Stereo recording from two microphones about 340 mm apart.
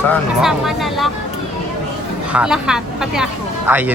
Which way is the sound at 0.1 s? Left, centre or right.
Centre.